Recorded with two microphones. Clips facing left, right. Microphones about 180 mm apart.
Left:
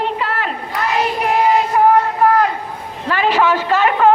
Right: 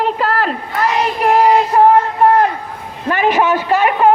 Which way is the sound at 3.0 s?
20° right (ahead or behind).